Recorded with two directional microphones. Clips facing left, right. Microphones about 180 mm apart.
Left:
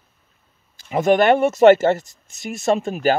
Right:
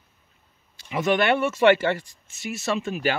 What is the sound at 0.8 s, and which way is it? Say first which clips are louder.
Speech: left 6 dB; 45° left (ahead or behind).